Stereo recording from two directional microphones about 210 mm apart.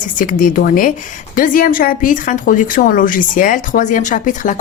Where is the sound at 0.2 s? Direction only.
40° left (ahead or behind).